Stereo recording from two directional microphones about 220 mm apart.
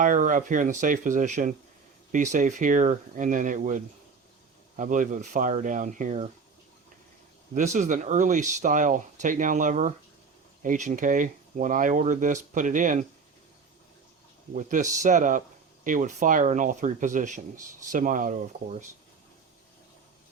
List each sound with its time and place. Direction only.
0.0 s speech: 35° right (ahead or behind)
7.5 s speech: 35° right (ahead or behind)
14.5 s speech: 35° right (ahead or behind)